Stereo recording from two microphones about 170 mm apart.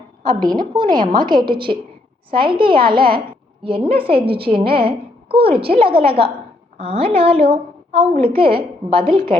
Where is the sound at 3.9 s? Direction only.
35° right (ahead or behind).